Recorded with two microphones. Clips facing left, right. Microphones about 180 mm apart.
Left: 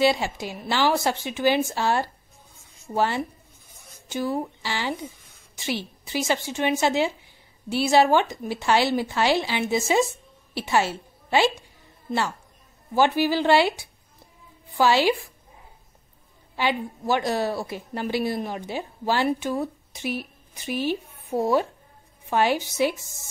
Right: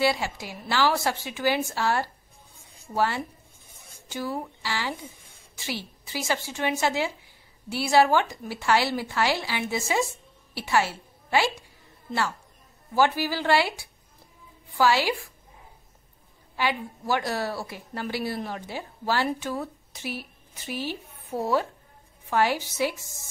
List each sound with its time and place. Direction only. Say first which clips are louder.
0.0 s speech: left 4 dB; 25° left (ahead or behind)
3.6 s a sound: left 1 dB; 25° right (ahead or behind)
4.1 s a woman's voice: left 5 dB; 20° left (ahead or behind)
12.9 s speech: left 3 dB; 20° left (ahead or behind)
14.8 s speech: left 3 dB; 25° left (ahead or behind)
16.5 s a woman's voice: left 3 dB; 20° left (ahead or behind)